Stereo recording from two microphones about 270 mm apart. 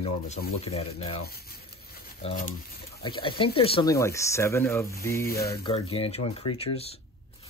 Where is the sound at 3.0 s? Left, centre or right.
Centre.